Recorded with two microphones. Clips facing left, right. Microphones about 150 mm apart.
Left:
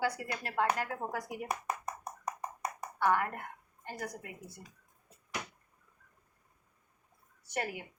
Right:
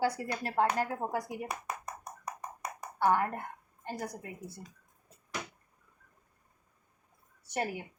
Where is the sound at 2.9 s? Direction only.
35° right (ahead or behind).